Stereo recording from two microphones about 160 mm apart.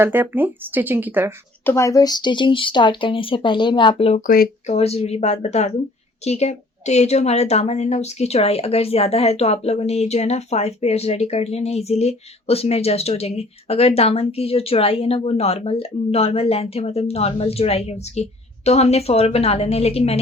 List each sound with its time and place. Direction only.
0.0 s speech: 10° right (ahead or behind)
1.6 s a woman's voice: 20° left (ahead or behind); by 20.1 s 40° left (ahead or behind)